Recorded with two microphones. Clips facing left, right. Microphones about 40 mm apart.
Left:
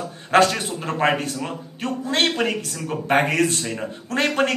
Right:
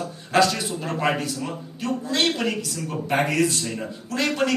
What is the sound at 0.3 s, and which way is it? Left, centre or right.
A man's voice, left.